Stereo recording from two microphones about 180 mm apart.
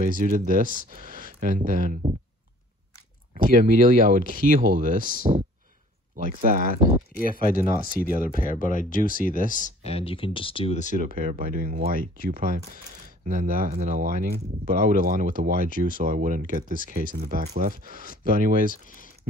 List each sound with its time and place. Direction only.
0.0 s speech: 45° right (ahead or behind)
3.3 s speech: 50° right (ahead or behind)
8.3 s speech: 50° left (ahead or behind)
11.0 s speech: 45° right (ahead or behind)
18.7 s speech: 50° left (ahead or behind)